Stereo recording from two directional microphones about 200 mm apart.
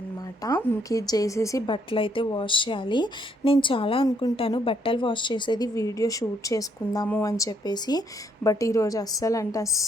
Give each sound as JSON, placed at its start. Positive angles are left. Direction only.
{"t": 0.4, "sound": "a woman's voice", "side_deg": 15}